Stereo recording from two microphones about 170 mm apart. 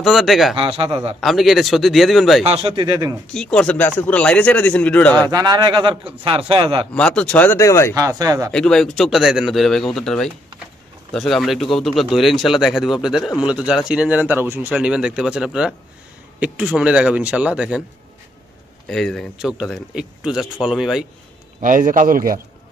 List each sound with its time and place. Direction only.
0.0 s speech: centre (ahead or behind)
0.6 s a man's voice: 30° right (ahead or behind)
1.2 s speech: centre (ahead or behind)
2.4 s speech: 30° right (ahead or behind)
3.3 s speech: 5° left (ahead or behind)
5.2 s speech: 20° right (ahead or behind)
6.9 s speech: 5° left (ahead or behind)
7.9 s speech: 20° right (ahead or behind)
8.5 s speech: 5° left (ahead or behind)
18.9 s speech: centre (ahead or behind)
21.5 s a man's voice: 50° right (ahead or behind)